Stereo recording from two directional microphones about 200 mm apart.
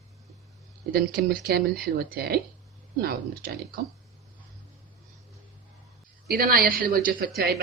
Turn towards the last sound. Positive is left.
turn(degrees=-50)  # may be behind; listen again after turning